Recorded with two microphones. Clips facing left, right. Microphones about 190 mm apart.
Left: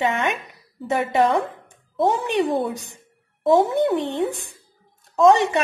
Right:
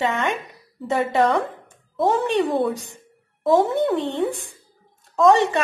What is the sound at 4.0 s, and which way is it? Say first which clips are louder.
A woman's voice: even; 15° left (ahead or behind).